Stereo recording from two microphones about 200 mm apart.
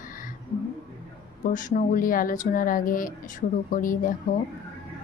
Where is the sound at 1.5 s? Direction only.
40° left (ahead or behind).